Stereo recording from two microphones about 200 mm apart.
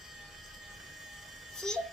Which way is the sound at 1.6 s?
Centre (ahead or behind).